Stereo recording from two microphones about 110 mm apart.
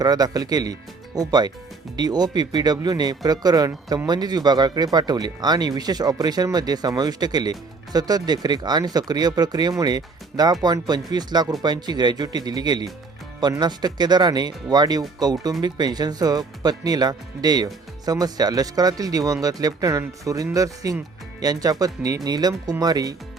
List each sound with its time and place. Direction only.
0.0 s speech: 35° right (ahead or behind)